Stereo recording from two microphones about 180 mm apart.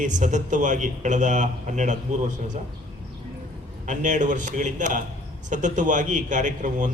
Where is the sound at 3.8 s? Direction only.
45° right (ahead or behind).